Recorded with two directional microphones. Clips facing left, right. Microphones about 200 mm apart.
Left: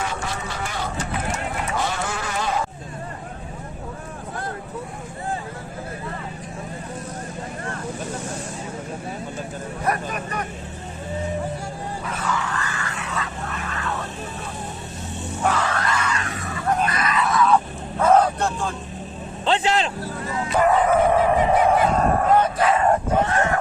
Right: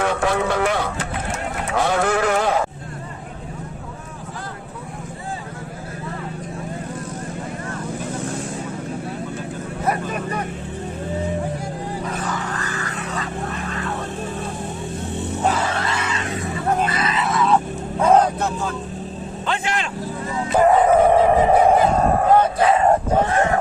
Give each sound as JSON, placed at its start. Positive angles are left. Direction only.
{"t": 0.0, "sound": "livestock", "side_deg": -60}
{"t": 9.8, "sound": "vehicle", "side_deg": -25}
{"t": 12.0, "sound": "vehicle", "side_deg": -40}
{"t": 15.4, "sound": "music", "side_deg": -25}
{"t": 18.0, "sound": "vehicle", "side_deg": -10}
{"t": 19.5, "sound": "vehicle", "side_deg": 30}
{"t": 20.6, "sound": "a sound", "side_deg": -30}